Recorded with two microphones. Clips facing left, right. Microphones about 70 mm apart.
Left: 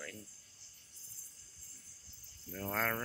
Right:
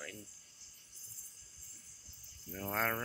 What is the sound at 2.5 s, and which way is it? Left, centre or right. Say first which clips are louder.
Speech: even; centre.